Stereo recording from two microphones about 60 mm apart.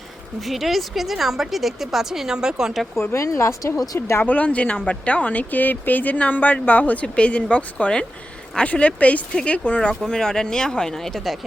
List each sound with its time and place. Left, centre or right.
0.4 s a woman's voice: centre
3.0 s speech: left
3.8 s speech: left
4.2 s speech: left
9.9 s speech: centre